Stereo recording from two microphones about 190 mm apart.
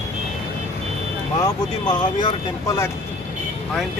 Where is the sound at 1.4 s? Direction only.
20° left (ahead or behind).